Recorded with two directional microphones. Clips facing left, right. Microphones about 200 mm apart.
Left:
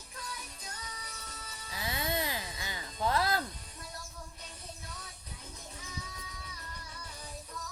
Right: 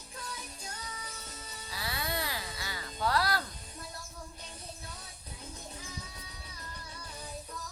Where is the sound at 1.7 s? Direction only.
20° left (ahead or behind).